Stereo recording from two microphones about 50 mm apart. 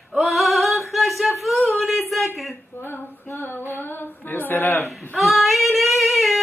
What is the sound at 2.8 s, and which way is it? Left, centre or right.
Female singing, left.